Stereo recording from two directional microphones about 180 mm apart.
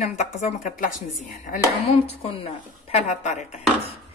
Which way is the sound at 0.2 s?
40° left (ahead or behind).